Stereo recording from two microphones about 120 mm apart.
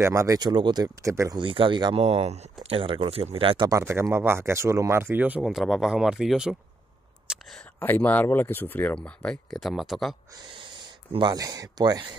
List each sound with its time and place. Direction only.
0.0 s speech: 25° right (ahead or behind)
1.0 s speech: 25° right (ahead or behind)
1.4 s speech: 45° right (ahead or behind)
2.0 s speech: 60° right (ahead or behind)
2.6 s speech: 50° right (ahead or behind)
3.6 s speech: 25° right (ahead or behind)
5.4 s speech: centre (ahead or behind)
7.8 s speech: 15° left (ahead or behind); by 10.1 s centre (ahead or behind)
11.1 s speech: 35° right (ahead or behind)